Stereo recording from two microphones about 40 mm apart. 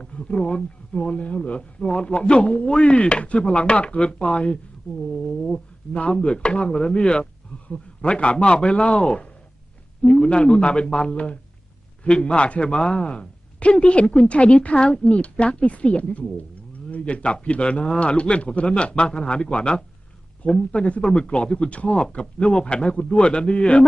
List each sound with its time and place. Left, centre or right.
0.0 s speech: left
5.3 s speech: centre
5.9 s speech: left